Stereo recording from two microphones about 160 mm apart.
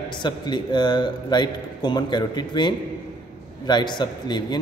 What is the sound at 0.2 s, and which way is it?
A man's voice, 30° left (ahead or behind).